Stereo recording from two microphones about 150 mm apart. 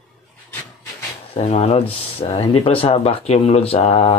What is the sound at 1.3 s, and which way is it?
Speech, 45° left (ahead or behind).